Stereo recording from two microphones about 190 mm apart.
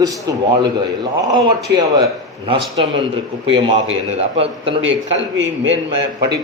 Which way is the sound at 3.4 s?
30° right (ahead or behind).